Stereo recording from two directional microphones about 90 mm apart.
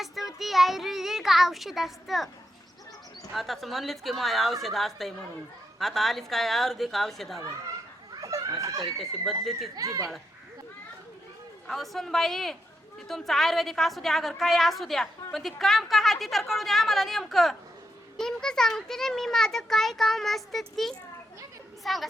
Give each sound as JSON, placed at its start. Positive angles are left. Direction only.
{"t": 0.3, "sound": "a woman's voice", "side_deg": 0}
{"t": 3.3, "sound": "a woman's voice", "side_deg": 0}
{"t": 8.2, "sound": "a sound", "side_deg": -40}
{"t": 8.9, "sound": "a woman's voice", "side_deg": 0}
{"t": 9.7, "sound": "speech", "side_deg": -40}
{"t": 11.7, "sound": "a woman's voice", "side_deg": 0}